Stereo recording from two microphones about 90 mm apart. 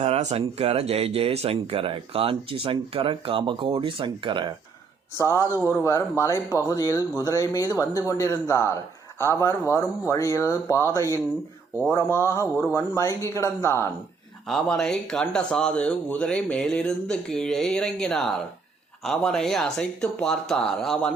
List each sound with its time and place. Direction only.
0.3 s speech: 90° right; by 4.5 s 60° right (ahead or behind)
5.1 s speech: 35° left (ahead or behind)
14.4 s speech: 5° left (ahead or behind)